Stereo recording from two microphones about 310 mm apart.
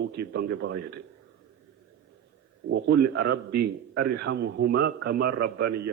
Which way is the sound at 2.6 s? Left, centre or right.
Right.